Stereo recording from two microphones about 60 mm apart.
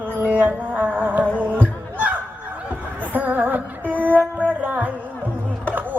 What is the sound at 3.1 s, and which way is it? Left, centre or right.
Music, right.